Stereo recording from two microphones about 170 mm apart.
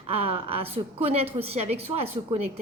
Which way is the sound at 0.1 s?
35° right (ahead or behind).